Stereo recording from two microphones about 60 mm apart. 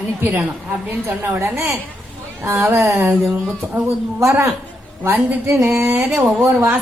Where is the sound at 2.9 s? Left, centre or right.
Right.